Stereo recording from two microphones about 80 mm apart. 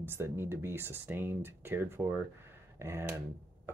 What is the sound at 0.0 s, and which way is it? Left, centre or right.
Speech, right.